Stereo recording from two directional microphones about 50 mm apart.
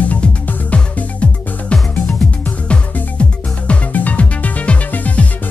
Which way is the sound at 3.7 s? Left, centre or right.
Left.